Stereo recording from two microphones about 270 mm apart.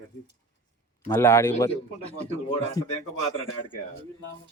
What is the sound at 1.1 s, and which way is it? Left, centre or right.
Speech, centre.